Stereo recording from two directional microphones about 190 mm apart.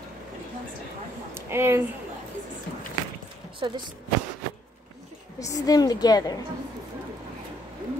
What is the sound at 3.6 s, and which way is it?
Speech, 25° right (ahead or behind).